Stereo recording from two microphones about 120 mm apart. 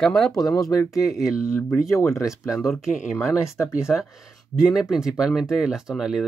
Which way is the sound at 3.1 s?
25° left (ahead or behind).